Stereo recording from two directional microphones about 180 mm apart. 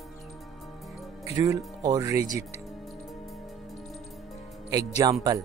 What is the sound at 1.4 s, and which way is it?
Speech, 20° right (ahead or behind).